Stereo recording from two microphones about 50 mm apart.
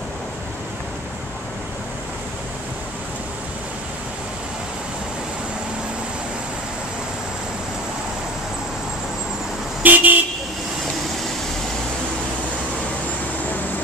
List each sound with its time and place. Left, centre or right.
9.8 s car: right